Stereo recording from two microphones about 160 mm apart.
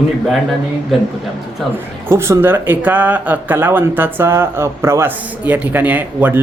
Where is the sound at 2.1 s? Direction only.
15° right (ahead or behind).